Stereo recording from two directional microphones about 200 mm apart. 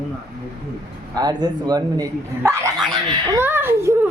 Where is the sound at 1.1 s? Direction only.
20° right (ahead or behind).